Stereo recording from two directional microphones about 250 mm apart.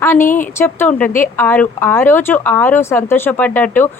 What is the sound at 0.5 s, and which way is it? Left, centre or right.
Speech, centre.